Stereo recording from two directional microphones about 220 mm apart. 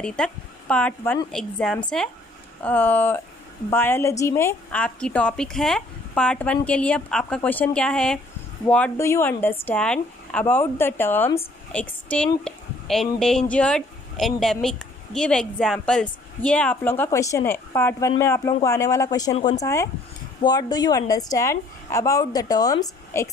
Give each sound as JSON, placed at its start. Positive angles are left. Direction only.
{"t": 0.0, "sound": "speech", "side_deg": 5}
{"t": 19.3, "sound": "speech", "side_deg": 30}
{"t": 19.6, "sound": "speech", "side_deg": 10}